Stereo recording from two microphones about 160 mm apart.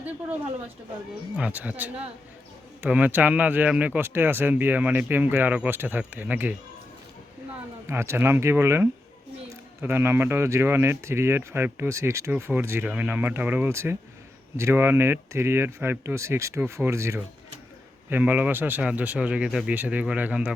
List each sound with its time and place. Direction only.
1.4 s a man's voice: 10° right (ahead or behind)
7.9 s a man's voice: 15° right (ahead or behind)